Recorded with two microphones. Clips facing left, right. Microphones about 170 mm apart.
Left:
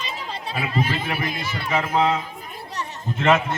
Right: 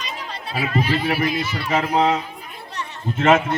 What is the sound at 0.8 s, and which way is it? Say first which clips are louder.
Speech: right 5 dB; 50° left (ahead or behind).